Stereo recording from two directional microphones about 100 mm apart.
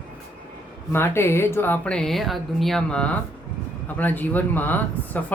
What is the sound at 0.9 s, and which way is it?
Speech, 25° left (ahead or behind).